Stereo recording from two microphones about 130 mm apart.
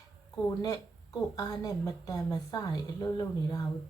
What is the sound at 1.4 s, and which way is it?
Speech, 25° left (ahead or behind).